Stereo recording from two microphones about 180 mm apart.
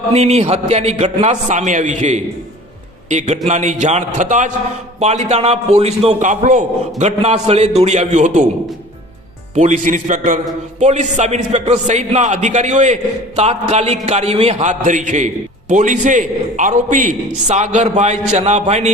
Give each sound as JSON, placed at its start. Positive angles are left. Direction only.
{"t": 0.1, "sound": "a man's voice", "side_deg": -35}
{"t": 9.6, "sound": "a man's voice", "side_deg": -40}